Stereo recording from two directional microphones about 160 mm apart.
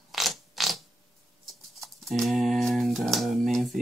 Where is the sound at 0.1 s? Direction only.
Centre (ahead or behind).